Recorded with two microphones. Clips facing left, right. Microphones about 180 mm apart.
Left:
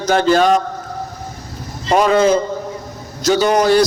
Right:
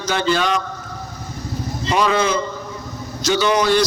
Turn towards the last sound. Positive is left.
turn(degrees=45)  # may be behind; listen again after turning